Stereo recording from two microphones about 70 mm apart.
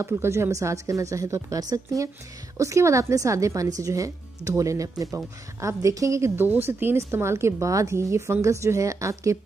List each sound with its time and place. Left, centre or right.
0.0 s a woman's voice: right
6.3 s a woman's voice: right